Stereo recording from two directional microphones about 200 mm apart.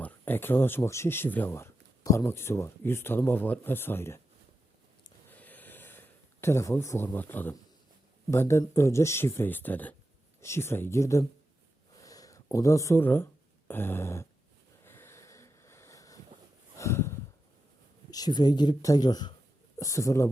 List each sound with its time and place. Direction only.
0.0 s speech: 10° left (ahead or behind)
5.3 s a sound: 10° left (ahead or behind)
8.3 s speech: 15° left (ahead or behind)
14.8 s wheeze: 10° left (ahead or behind)
16.7 s snort: 15° left (ahead or behind)
18.1 s speech: 20° left (ahead or behind)